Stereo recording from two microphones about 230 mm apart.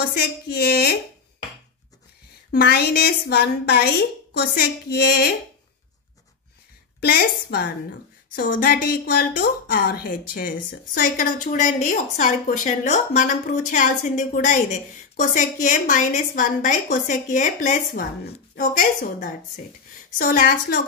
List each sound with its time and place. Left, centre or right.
0.0 s a woman's voice: left
2.5 s a woman's voice: left
7.0 s a woman's voice: left